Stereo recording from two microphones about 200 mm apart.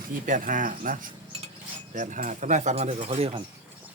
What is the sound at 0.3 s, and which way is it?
Speech, 40° right (ahead or behind).